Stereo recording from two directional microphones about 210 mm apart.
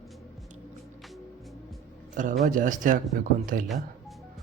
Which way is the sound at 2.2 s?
40° right (ahead or behind).